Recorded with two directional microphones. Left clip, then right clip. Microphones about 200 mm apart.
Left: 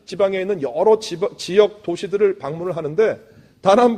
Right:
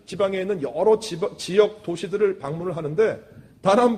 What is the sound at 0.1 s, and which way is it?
A man's voice, 30° left (ahead or behind).